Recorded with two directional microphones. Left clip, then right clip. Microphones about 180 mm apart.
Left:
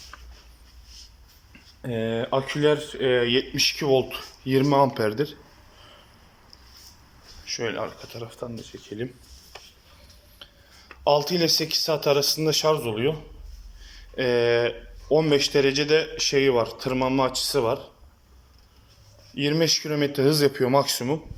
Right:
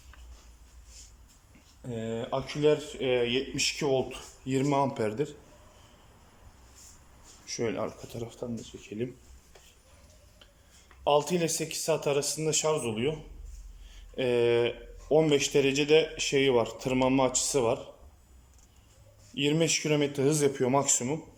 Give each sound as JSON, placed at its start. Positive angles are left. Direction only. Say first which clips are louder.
{"t": 1.8, "sound": "speech", "louder": "left 8 dB", "side_deg": 5}
{"t": 7.4, "sound": "speech", "louder": "left 3 dB", "side_deg": -25}
{"t": 11.0, "sound": "speech", "louder": "left 5 dB", "side_deg": -5}
{"t": 14.2, "sound": "a man's voice", "louder": "left 4 dB", "side_deg": -10}
{"t": 19.3, "sound": "a man's voice", "louder": "left 4 dB", "side_deg": -15}